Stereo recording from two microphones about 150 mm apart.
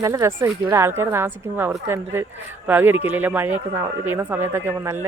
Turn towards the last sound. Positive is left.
turn(degrees=-15)  # may be behind; listen again after turning